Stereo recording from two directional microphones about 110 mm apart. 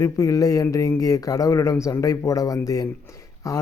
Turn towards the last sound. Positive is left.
turn(degrees=30)  # may be behind; listen again after turning